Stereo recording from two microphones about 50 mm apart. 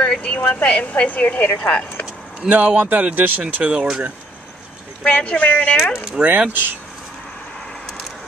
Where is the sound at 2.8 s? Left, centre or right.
Right.